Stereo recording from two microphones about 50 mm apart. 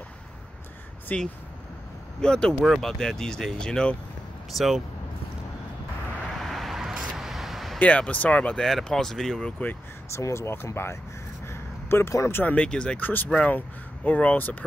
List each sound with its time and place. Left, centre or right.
1.1 s speech: left
4.5 s speech: centre
6.3 s a sound: centre
7.8 s speech: left
8.5 s speech: centre
9.6 s speech: left
10.0 s speech: left
11.4 s a sound: left
12.4 s speech: left
13.0 s speech: left